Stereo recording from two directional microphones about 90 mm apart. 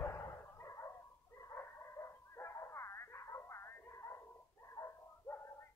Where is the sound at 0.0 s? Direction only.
30° left (ahead or behind).